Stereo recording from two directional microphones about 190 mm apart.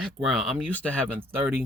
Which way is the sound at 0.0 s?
Centre (ahead or behind).